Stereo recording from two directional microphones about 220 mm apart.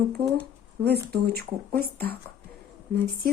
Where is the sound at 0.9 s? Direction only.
45° right (ahead or behind).